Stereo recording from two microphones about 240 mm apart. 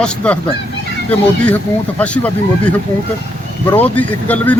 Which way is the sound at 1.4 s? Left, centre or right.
Centre.